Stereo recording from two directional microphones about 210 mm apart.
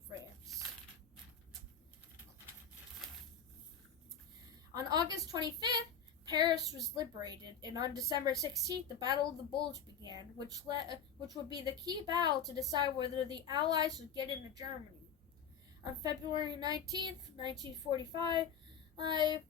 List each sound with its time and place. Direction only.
4.7 s a woman's voice: 20° right (ahead or behind)
15.8 s a woman's voice: 20° right (ahead or behind)